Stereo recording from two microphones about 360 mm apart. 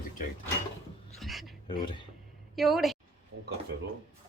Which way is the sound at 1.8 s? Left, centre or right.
Centre.